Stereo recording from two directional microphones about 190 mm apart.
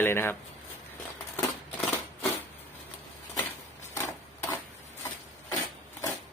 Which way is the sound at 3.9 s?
15° left (ahead or behind).